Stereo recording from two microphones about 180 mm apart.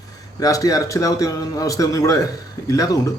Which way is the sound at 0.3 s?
20° left (ahead or behind).